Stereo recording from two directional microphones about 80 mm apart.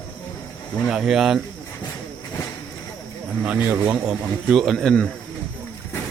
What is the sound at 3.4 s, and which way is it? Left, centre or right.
Speech, centre.